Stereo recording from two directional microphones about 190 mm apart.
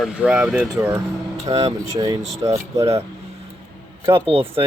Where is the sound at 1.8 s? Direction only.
20° right (ahead or behind).